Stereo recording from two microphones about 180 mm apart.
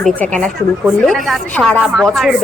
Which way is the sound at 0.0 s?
5° left (ahead or behind).